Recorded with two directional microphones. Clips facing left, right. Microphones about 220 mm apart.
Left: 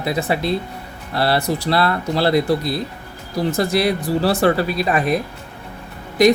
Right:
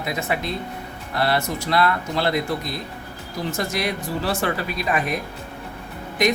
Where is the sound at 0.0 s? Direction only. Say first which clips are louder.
Left 5 dB; 35° left (ahead or behind).